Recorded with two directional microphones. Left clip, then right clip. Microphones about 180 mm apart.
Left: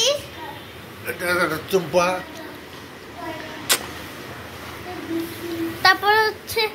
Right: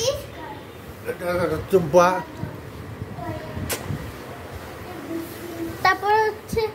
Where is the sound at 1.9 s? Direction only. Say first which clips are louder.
Right 4 dB; 65° right (ahead or behind).